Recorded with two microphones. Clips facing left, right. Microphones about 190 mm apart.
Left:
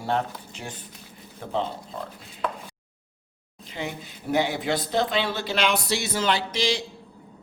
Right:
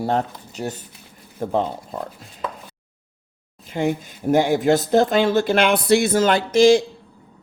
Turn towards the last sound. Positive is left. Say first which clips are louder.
# right 13 dB
turn(degrees=-50)  # may be behind; listen again after turning